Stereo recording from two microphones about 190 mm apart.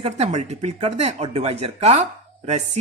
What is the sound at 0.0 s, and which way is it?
Speech, 35° right (ahead or behind).